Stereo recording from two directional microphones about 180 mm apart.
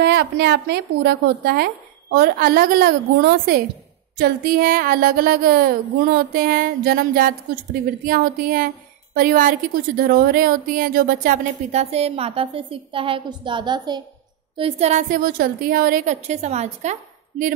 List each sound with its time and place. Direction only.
0.0 s a woman's voice: 65° right (ahead or behind); by 14.0 s 25° right (ahead or behind)
14.6 s a woman's voice: 35° right (ahead or behind)